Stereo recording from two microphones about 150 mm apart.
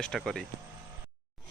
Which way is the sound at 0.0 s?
5° left (ahead or behind).